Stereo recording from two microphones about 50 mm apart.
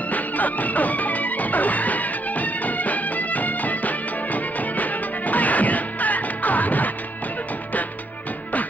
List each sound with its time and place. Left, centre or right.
0.1 s music: left